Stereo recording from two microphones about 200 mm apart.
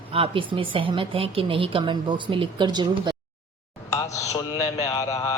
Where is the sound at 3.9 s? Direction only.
15° left (ahead or behind).